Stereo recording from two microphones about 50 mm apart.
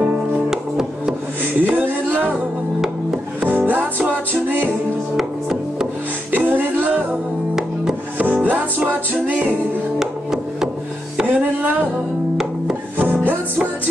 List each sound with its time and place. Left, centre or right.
0.0 s music: centre
1.4 s music: right
3.4 s music: right
5.1 s music: centre
6.3 s music: right
8.5 s music: right
9.9 s music: centre
11.2 s music: right
12.9 s music: right